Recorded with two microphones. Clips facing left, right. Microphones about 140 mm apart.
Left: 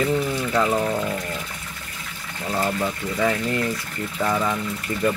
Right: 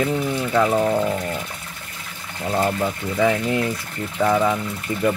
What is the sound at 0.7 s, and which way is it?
Speech, 20° right (ahead or behind).